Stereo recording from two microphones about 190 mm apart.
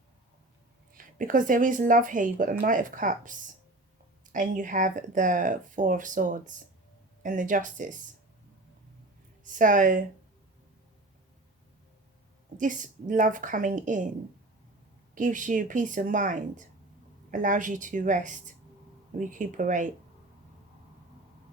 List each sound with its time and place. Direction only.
0.9 s speech: 45° right (ahead or behind)
9.4 s speech: 45° right (ahead or behind)
12.5 s speech: 45° right (ahead or behind)
15.1 s speech: 45° right (ahead or behind)